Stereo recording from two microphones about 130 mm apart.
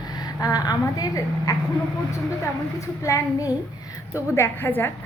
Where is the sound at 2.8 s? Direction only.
25° left (ahead or behind).